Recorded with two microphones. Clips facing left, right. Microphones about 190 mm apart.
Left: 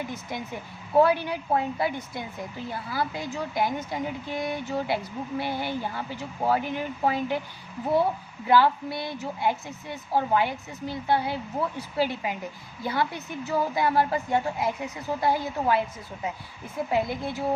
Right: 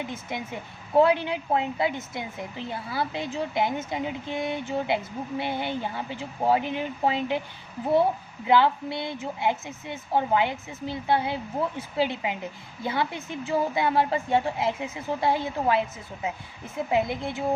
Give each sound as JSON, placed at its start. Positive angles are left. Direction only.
{"t": 0.0, "sound": "a woman's voice", "side_deg": -20}
{"t": 8.4, "sound": "a woman's voice", "side_deg": -20}